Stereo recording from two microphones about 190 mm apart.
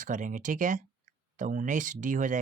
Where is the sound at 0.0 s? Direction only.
40° right (ahead or behind).